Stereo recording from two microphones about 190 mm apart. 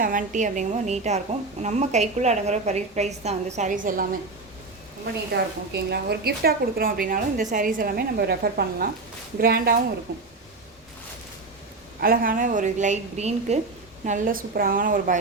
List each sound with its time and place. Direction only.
0.0 s a woman's voice: 45° right (ahead or behind)
5.3 s a woman's voice: 60° right (ahead or behind)
10.1 s speech: 60° right (ahead or behind)
11.9 s a woman's voice: 50° right (ahead or behind)